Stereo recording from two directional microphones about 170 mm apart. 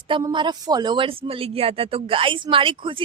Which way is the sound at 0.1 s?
25° right (ahead or behind).